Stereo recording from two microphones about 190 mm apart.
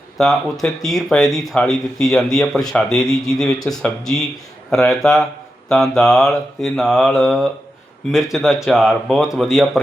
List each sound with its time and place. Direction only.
0.2 s mantra: centre (ahead or behind)